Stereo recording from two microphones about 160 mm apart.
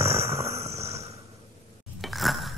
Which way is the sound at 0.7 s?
40° right (ahead or behind).